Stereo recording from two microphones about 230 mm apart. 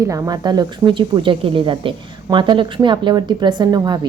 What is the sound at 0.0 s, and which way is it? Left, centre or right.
A woman's voice, centre.